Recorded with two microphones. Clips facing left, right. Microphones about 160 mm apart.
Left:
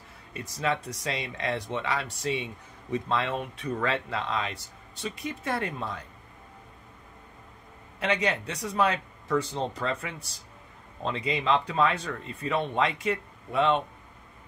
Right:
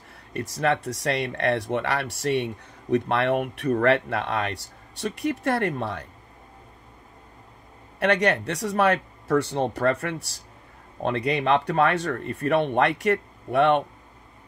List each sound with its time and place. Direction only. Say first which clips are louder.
0.3 s speech: right 5 dB; 60° right (ahead or behind)
8.0 s speech: right 6 dB; 70° right (ahead or behind)